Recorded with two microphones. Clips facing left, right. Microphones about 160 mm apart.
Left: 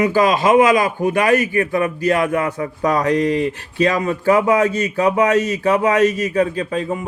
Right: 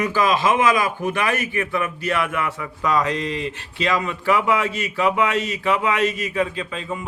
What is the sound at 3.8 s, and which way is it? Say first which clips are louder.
Speech: left 6 dB; 40° left (ahead or behind).